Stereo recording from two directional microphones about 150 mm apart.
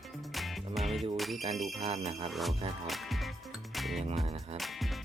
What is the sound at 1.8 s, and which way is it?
Jingle bell, 45° right (ahead or behind).